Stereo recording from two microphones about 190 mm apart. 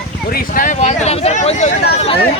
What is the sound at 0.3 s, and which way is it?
Speech, 50° left (ahead or behind).